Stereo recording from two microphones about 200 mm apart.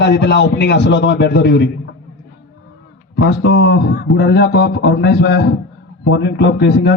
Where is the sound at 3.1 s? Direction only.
55° left (ahead or behind).